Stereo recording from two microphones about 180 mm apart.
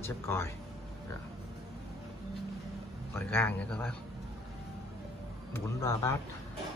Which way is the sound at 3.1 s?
10° left (ahead or behind).